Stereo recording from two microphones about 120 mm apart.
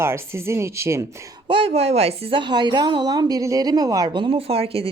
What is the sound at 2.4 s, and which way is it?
A woman's voice, 40° right (ahead or behind).